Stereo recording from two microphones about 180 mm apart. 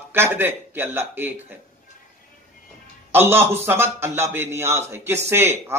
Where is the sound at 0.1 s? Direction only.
15° right (ahead or behind).